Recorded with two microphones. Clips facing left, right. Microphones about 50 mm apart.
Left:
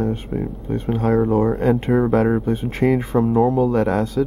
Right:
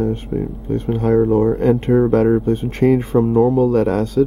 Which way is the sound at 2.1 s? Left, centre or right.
Centre.